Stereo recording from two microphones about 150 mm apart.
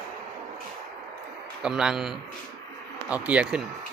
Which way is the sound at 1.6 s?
5° right (ahead or behind).